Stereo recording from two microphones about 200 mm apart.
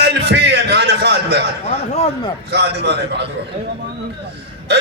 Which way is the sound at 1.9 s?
35° left (ahead or behind).